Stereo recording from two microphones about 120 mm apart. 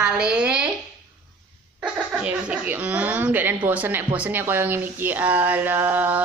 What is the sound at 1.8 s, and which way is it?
A woman's voice, 10° right (ahead or behind).